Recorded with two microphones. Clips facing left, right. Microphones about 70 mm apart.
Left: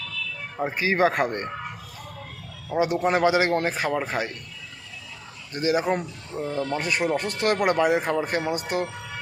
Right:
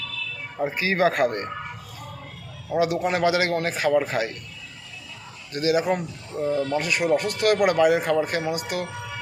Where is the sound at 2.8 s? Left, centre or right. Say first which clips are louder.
Left 1 dB; left.